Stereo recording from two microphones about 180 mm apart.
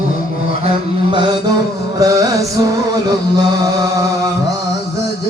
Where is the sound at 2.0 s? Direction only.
20° right (ahead or behind).